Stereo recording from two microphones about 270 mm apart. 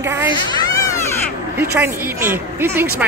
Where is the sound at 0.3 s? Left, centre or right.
Centre.